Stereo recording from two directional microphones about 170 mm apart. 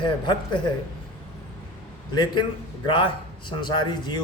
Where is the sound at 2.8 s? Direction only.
30° left (ahead or behind).